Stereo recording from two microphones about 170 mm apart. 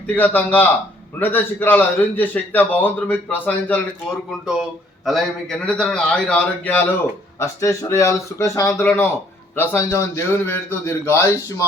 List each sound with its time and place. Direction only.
0.1 s a man's voice: 10° left (ahead or behind)
5.0 s a man's voice: centre (ahead or behind); by 11.6 s 15° left (ahead or behind)